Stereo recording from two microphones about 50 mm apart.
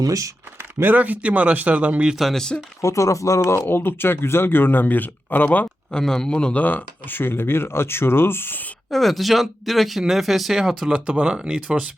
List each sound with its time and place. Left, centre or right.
0.6 s a sound: right
0.9 s speech: right
2.3 s speech: centre
2.8 s speech: left
3.7 s speech: left
5.9 s speech: centre
6.6 s speech: left
8.9 s speech: centre
10.9 s speech: right